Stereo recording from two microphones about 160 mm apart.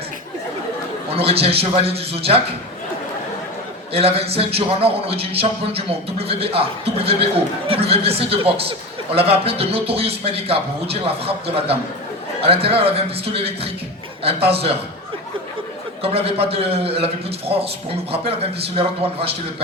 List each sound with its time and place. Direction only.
1.1 s a man's voice: 35° right (ahead or behind)
3.9 s a man's voice: 35° right (ahead or behind)
16.0 s a man's voice: 35° right (ahead or behind)
18.8 s a man's voice: 35° right (ahead or behind)